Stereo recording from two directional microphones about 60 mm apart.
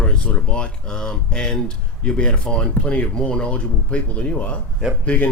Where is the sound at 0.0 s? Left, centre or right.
Centre.